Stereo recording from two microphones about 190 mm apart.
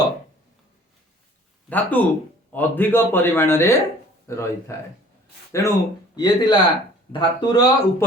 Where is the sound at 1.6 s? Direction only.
10° left (ahead or behind).